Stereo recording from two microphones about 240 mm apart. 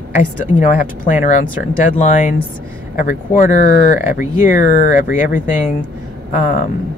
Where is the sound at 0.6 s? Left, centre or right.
Left.